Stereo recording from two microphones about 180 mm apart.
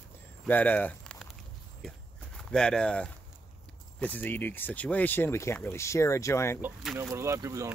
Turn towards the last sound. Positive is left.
turn(degrees=-15)  # may be behind; listen again after turning